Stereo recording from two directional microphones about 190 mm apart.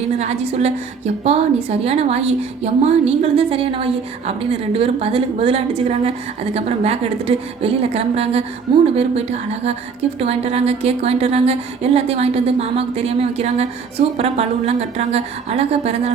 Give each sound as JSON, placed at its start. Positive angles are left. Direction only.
{"t": 0.2, "sound": "a woman's voice", "side_deg": -35}